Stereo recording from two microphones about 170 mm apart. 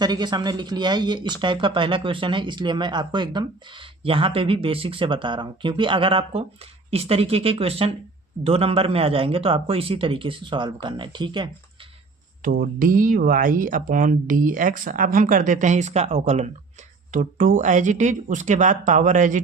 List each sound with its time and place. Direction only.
0.0 s a man's voice: 25° right (ahead or behind)
12.4 s speech: 55° right (ahead or behind); by 16.5 s 40° right (ahead or behind)
17.1 s speech: 50° right (ahead or behind)